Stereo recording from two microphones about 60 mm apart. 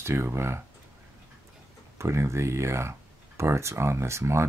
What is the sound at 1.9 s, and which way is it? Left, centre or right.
Speech, right.